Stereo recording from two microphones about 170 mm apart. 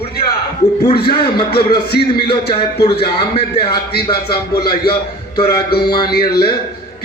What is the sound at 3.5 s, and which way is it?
A man's voice, 65° left (ahead or behind).